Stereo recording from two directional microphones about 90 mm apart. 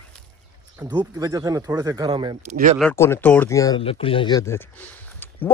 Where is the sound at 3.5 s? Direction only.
35° left (ahead or behind).